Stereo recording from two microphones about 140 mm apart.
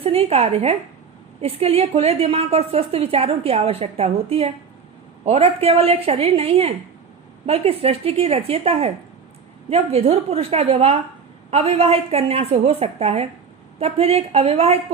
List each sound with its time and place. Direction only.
0.0 s a woman's voice: 45° right (ahead or behind)